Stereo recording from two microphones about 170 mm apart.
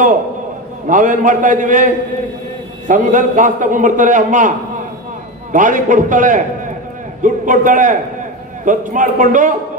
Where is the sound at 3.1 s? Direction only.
50° right (ahead or behind).